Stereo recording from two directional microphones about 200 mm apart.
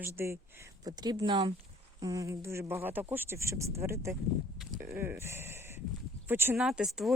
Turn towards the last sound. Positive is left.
turn(degrees=0)  # may be behind; listen again after turning